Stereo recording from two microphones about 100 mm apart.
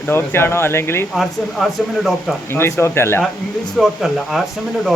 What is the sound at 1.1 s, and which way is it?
Speech, centre (ahead or behind).